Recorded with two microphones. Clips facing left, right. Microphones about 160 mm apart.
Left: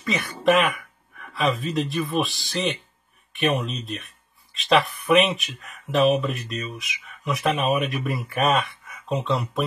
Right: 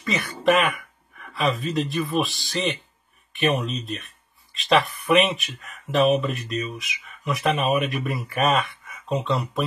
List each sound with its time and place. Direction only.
0.0 s speech: centre (ahead or behind)